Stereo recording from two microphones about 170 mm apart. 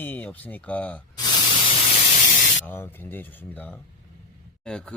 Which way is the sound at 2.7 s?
10° left (ahead or behind).